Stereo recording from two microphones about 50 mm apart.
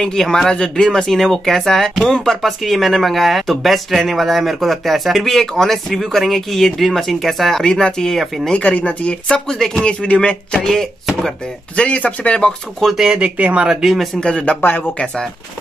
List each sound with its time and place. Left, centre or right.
0.0 s speech: centre
7.6 s speech: centre
8.6 s speech: left
9.5 s speech: centre
9.8 s speech: left
11.7 s speech: left
12.9 s speech: centre
13.2 s speech: right
13.7 s speech: centre
14.2 s speech: left